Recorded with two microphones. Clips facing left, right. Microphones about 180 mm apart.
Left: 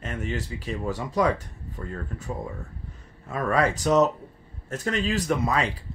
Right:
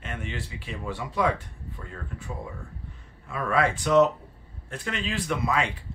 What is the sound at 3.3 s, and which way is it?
Speech, 40° left (ahead or behind).